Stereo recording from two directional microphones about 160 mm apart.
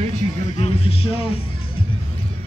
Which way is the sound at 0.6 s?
40° left (ahead or behind).